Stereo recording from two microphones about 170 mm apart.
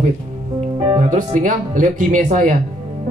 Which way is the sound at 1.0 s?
45° right (ahead or behind).